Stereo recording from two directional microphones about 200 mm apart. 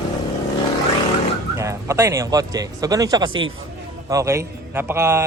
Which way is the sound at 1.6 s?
15° right (ahead or behind).